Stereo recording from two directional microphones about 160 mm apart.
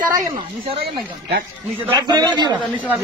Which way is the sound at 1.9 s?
25° right (ahead or behind).